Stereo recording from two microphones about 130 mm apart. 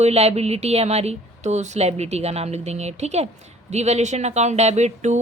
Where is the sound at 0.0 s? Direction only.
55° right (ahead or behind).